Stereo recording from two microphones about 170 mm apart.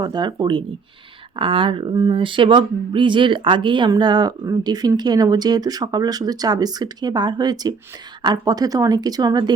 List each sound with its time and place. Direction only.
0.0 s speech: 25° right (ahead or behind)